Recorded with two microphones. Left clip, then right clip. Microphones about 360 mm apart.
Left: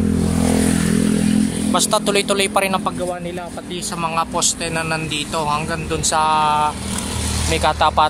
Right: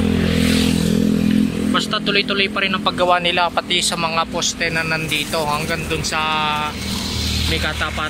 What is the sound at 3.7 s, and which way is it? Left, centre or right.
Speech, centre.